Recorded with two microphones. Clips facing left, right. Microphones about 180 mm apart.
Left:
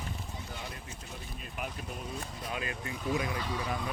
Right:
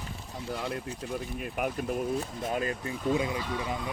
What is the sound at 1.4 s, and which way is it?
Speech, 55° right (ahead or behind).